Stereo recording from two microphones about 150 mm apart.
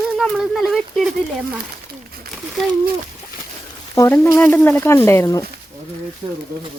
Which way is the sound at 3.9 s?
20° left (ahead or behind).